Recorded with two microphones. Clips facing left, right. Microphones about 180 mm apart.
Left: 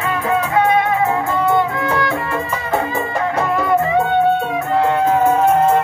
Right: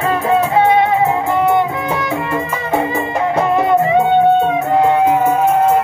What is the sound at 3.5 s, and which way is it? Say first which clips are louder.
Music: right 4 dB; 20° right (ahead or behind).